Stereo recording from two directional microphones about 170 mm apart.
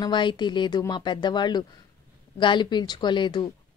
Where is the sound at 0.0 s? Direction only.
25° left (ahead or behind).